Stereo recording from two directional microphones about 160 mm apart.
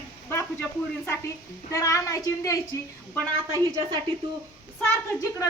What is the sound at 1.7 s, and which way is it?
Speech, 20° left (ahead or behind).